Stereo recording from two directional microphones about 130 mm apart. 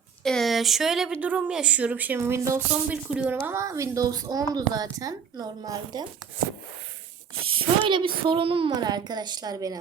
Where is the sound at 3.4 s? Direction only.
20° right (ahead or behind).